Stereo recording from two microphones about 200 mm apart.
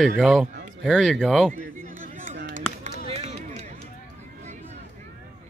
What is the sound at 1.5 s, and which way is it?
Chatter, 40° right (ahead or behind).